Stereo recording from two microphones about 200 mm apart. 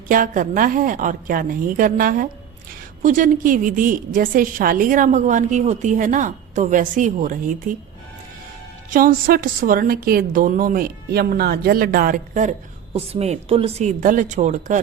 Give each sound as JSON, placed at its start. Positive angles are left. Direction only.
{"t": 0.1, "sound": "a woman's voice", "side_deg": -45}
{"t": 8.9, "sound": "a woman's voice", "side_deg": -45}